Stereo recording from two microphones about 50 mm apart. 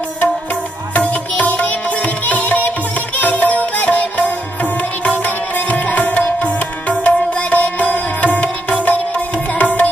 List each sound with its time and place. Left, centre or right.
0.9 s music: left